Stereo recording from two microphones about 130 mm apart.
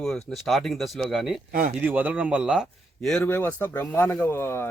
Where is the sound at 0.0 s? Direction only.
Centre (ahead or behind).